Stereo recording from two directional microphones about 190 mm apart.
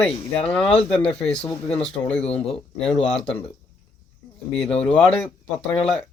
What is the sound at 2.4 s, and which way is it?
Speech, 30° left (ahead or behind).